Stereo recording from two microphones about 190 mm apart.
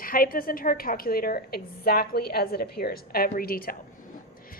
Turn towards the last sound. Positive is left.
turn(degrees=50)  # may be behind; listen again after turning